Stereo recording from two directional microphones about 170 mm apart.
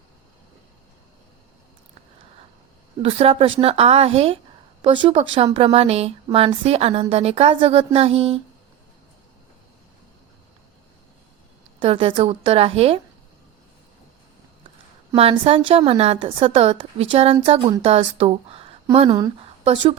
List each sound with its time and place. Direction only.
3.0 s a woman's voice: 35° right (ahead or behind)
11.8 s a woman's voice: 30° right (ahead or behind)
15.1 s a woman's voice: 35° right (ahead or behind)